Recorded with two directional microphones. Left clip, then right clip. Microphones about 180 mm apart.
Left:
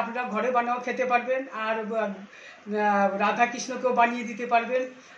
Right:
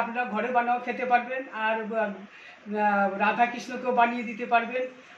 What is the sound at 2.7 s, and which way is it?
Speech, 25° left (ahead or behind).